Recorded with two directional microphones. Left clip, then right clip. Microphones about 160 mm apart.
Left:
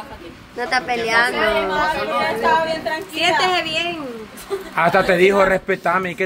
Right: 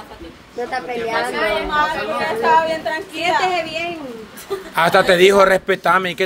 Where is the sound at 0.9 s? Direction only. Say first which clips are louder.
Left 3 dB; 90° left.